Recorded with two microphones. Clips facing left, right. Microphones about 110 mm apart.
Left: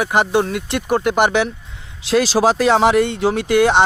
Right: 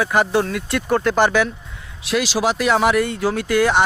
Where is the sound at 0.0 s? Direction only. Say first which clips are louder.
Left 1 dB; 20° left (ahead or behind).